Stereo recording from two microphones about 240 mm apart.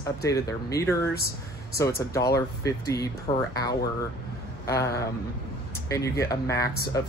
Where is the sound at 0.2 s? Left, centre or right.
Centre.